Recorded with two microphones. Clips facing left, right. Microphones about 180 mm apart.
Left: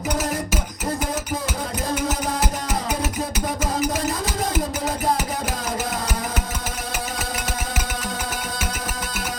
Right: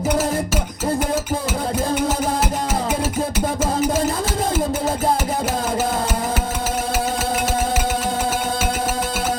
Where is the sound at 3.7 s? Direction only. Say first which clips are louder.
Right 3 dB; 30° right (ahead or behind).